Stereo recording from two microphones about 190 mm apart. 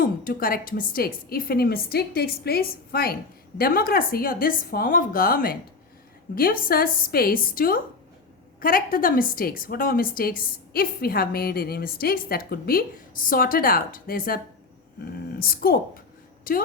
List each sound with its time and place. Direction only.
0.0 s a woman's voice: 50° left (ahead or behind)